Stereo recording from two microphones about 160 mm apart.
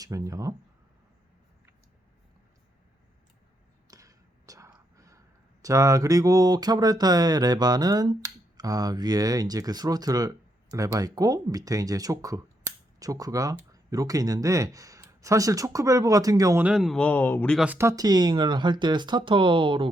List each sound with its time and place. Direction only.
0.0 s speech: 20° right (ahead or behind)
3.8 s whispering: 20° right (ahead or behind)
5.6 s speech: 20° right (ahead or behind)
16.6 s speech: centre (ahead or behind)
17.6 s speech: 15° right (ahead or behind); by 19.9 s 30° right (ahead or behind)